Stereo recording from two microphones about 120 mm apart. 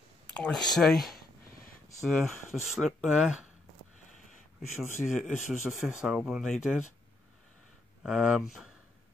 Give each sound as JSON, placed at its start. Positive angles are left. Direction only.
{"t": 0.3, "sound": "speech", "side_deg": 5}
{"t": 4.0, "sound": "a sound", "side_deg": 90}
{"t": 4.6, "sound": "speech", "side_deg": 0}
{"t": 8.0, "sound": "speech", "side_deg": -5}